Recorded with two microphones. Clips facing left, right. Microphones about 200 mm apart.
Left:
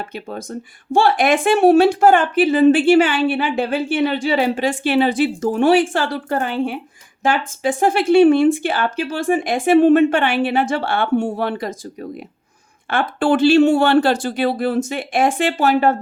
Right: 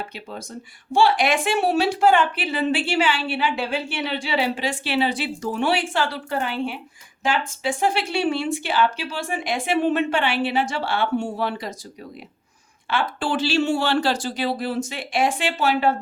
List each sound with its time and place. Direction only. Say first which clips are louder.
0.1 s speech: left 7 dB; 50° left (ahead or behind)
12.9 s speech: left 7 dB; 55° left (ahead or behind)